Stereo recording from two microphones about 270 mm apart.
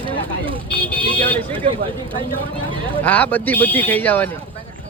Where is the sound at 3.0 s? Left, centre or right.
Centre.